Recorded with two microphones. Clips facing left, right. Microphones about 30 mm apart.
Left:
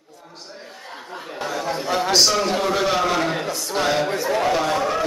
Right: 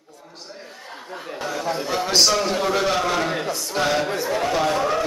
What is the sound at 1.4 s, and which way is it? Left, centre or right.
A man's voice, centre.